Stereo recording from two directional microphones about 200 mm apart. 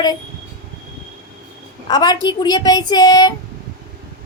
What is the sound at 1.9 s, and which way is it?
A woman's voice, 20° left (ahead or behind).